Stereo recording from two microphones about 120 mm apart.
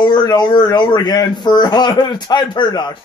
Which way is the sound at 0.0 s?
35° left (ahead or behind).